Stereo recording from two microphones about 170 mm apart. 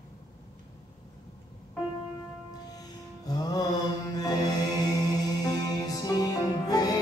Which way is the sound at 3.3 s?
20° left (ahead or behind).